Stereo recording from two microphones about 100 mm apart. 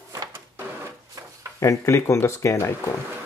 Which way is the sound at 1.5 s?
30° left (ahead or behind).